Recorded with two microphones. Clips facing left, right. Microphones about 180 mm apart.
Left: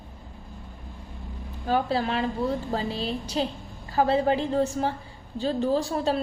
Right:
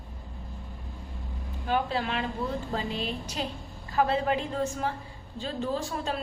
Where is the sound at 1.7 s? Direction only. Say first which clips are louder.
Left 4 dB; 35° left (ahead or behind).